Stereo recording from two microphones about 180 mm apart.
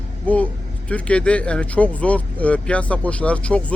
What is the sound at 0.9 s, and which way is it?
Speech, 5° left (ahead or behind).